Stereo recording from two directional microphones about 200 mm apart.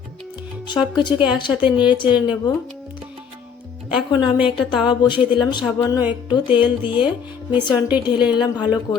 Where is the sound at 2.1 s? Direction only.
5° right (ahead or behind).